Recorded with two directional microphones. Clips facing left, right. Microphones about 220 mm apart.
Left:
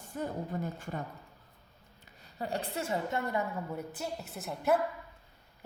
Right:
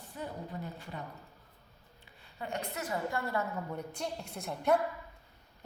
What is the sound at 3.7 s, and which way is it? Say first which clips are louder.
A woman's voice: left 1 dB; 5° left (ahead or behind).